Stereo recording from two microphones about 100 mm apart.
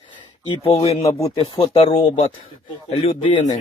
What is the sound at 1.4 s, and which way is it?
Speech, 65° left (ahead or behind).